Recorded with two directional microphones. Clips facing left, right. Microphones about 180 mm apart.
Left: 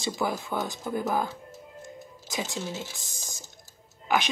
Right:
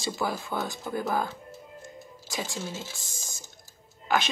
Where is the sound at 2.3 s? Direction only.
20° left (ahead or behind).